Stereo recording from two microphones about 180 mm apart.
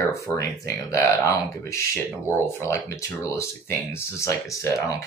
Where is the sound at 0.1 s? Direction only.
15° left (ahead or behind).